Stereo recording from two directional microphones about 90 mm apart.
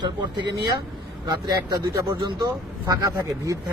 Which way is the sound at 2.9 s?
40° right (ahead or behind).